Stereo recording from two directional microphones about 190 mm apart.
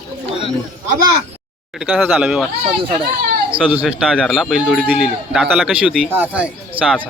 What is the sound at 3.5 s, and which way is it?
A man's voice, 5° right (ahead or behind).